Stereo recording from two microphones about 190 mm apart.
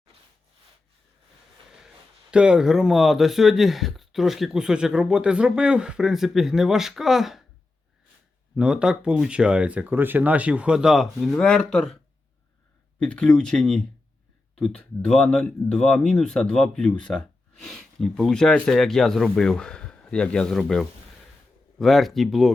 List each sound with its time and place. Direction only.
0.1 s sawing: 30° right (ahead or behind)
2.3 s speech: 5° right (ahead or behind)
8.5 s speech: 5° right (ahead or behind)
13.0 s speech: 5° left (ahead or behind)